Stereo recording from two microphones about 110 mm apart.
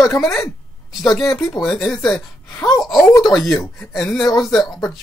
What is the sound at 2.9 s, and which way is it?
Speech, 30° left (ahead or behind).